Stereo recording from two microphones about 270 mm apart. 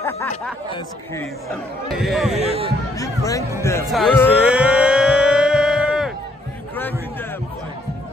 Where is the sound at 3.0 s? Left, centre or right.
Centre.